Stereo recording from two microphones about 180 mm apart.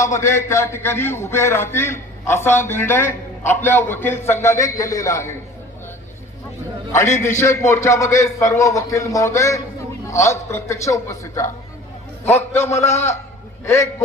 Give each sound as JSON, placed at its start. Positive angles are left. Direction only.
{"t": 0.0, "sound": "a man's voice", "side_deg": 15}
{"t": 6.9, "sound": "a man's voice", "side_deg": 15}